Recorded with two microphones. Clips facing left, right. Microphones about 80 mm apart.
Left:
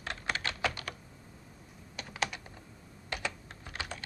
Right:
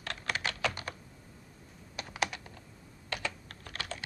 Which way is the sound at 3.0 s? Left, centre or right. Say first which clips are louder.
Even; centre.